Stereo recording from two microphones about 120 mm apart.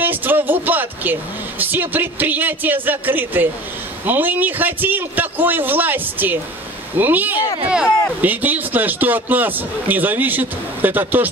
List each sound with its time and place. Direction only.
0.0 s vehicle: 15° right (ahead or behind)
1.6 s a man's voice: 15° right (ahead or behind)